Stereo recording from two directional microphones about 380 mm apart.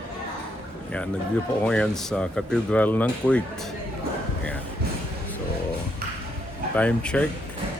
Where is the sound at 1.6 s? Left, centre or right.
Centre.